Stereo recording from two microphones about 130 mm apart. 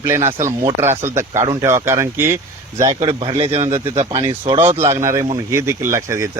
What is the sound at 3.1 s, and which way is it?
Speech, 50° right (ahead or behind).